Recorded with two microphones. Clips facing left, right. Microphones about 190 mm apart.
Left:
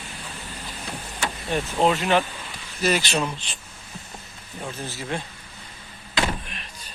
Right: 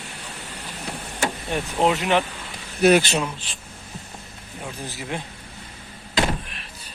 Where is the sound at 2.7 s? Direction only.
60° right (ahead or behind).